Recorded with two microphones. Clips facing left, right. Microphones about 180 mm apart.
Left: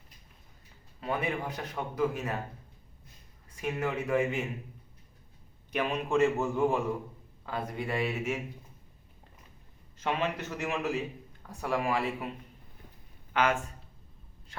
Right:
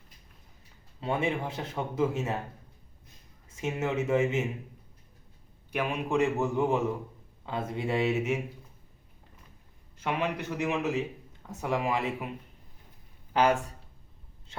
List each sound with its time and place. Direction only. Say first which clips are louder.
1.0 s speech: right 3 dB; 25° right (ahead or behind)
3.5 s speech: right 2 dB; 25° right (ahead or behind)
5.7 s a man's voice: even; 15° right (ahead or behind)
10.0 s a man's voice: right 1 dB; 15° right (ahead or behind)
13.3 s speech: right 3 dB; 35° right (ahead or behind)